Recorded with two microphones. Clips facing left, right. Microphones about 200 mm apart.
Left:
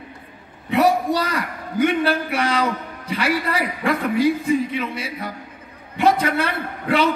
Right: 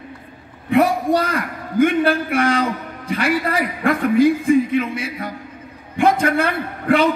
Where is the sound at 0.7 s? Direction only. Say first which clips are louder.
Right 2 dB; 50° right (ahead or behind).